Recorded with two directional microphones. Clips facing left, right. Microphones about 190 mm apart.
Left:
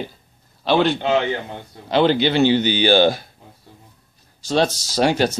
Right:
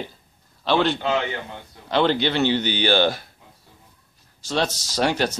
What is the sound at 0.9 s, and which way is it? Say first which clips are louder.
Speech: left 4 dB; 25° left (ahead or behind).